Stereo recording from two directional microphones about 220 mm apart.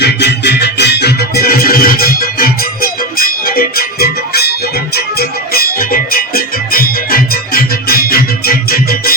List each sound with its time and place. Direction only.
0.0 s music: 50° left (ahead or behind)